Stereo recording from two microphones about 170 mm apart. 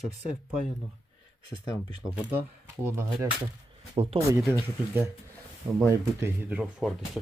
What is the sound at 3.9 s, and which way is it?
Speech, 35° right (ahead or behind).